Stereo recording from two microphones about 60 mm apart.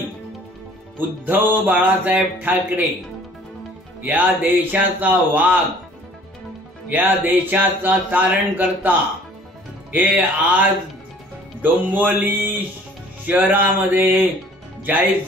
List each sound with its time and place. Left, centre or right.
0.9 s speech: right
4.0 s speech: right
6.9 s speech: right
9.9 s a sound: right
11.6 s speech: right
13.3 s a sound: right
14.8 s speech: right